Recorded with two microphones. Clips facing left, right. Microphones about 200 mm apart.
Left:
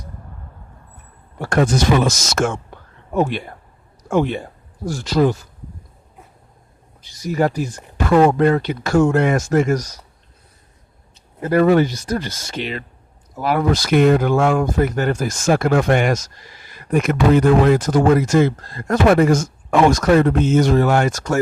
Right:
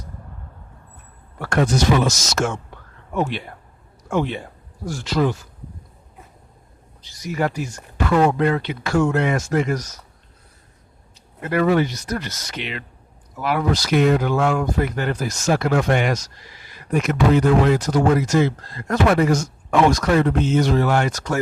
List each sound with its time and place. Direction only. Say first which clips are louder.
1.4 s speech: left 2 dB; 40° left (ahead or behind)
4.9 s speech: left 4 dB; 40° left (ahead or behind)
7.2 s speech: left 4 dB; 35° left (ahead or behind)
8.0 s speech: left 4 dB; 50° left (ahead or behind)
11.3 s speech: left 4 dB; 35° left (ahead or behind)
11.9 s speech: left 4 dB; 30° left (ahead or behind); by 21.3 s 45° left (ahead or behind)